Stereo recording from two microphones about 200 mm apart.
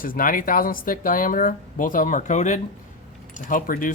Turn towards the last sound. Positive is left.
turn(degrees=45)  # may be behind; listen again after turning